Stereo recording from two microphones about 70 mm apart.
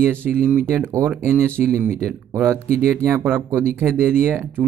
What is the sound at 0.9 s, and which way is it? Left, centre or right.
Speech, right.